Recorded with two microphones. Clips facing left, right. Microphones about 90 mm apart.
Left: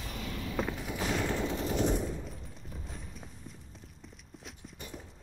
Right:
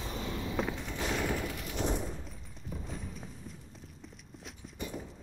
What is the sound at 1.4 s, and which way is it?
Machine gun, 25° left (ahead or behind).